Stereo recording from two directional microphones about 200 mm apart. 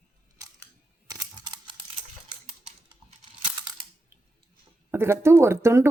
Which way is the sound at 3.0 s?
25° right (ahead or behind).